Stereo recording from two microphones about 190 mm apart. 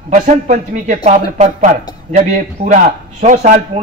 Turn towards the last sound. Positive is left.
turn(degrees=-40)  # may be behind; listen again after turning